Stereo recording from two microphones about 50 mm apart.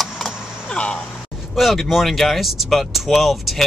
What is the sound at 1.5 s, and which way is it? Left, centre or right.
Speech, centre.